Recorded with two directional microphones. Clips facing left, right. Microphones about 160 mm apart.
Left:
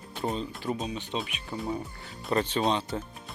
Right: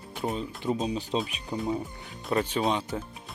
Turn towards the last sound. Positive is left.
turn(degrees=-10)  # may be behind; listen again after turning